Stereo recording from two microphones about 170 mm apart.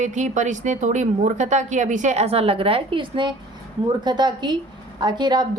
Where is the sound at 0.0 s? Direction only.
45° right (ahead or behind).